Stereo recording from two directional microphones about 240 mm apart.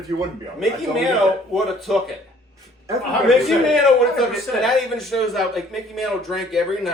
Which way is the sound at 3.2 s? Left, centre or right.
Centre.